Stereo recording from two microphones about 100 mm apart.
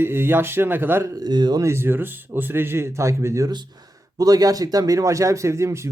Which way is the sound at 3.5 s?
45° right (ahead or behind).